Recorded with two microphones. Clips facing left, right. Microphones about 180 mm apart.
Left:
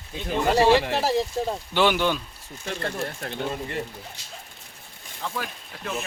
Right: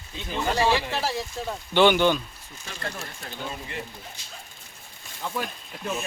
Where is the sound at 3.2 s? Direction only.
55° left (ahead or behind).